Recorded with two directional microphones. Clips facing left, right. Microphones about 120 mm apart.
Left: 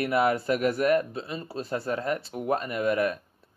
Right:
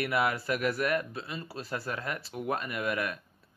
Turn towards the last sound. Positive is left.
turn(degrees=35)  # may be behind; listen again after turning